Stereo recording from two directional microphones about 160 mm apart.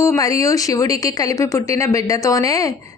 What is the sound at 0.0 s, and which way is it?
Speech, 20° left (ahead or behind).